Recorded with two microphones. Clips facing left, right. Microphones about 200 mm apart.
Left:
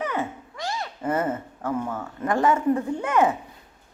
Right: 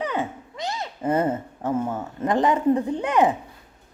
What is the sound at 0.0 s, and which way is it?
A woman's voice, 15° right (ahead or behind).